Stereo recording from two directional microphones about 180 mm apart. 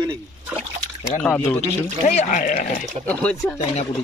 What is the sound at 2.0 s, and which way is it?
Speech, 45° left (ahead or behind).